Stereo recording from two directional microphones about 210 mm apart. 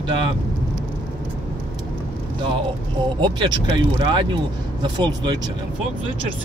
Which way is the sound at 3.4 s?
25° right (ahead or behind).